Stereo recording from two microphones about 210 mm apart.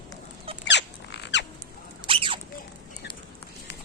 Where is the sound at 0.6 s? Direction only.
55° left (ahead or behind).